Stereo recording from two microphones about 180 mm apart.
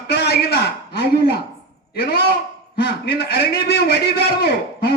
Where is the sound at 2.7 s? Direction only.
60° left (ahead or behind).